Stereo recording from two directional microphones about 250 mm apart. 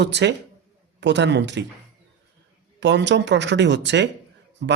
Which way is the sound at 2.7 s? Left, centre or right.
Right.